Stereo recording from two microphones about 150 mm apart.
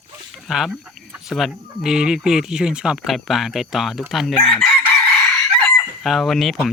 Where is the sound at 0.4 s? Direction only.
Centre (ahead or behind).